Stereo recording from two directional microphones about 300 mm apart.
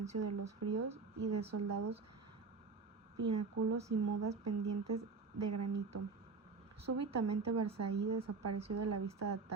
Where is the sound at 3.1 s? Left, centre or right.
Right.